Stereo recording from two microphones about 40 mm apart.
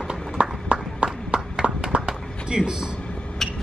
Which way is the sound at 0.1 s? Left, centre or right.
Right.